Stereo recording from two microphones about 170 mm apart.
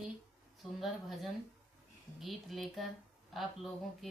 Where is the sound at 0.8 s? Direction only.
Centre (ahead or behind).